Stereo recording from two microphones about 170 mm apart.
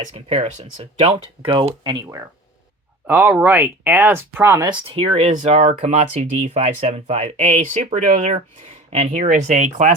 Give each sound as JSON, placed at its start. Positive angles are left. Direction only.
{"t": 0.1, "sound": "speech", "side_deg": -40}
{"t": 3.1, "sound": "speech", "side_deg": -10}